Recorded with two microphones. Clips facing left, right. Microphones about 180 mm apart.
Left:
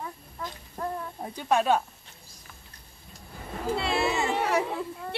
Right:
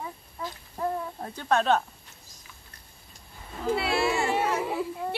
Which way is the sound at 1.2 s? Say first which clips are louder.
Left 1 dB; 10° left (ahead or behind).